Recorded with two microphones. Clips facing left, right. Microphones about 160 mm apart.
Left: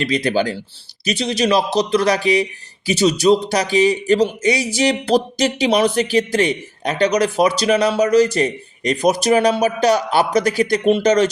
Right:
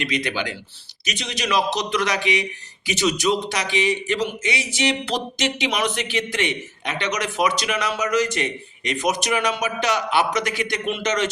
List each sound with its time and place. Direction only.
0.0 s speech: 35° left (ahead or behind)